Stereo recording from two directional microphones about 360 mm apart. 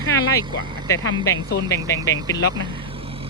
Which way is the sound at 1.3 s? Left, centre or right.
Centre.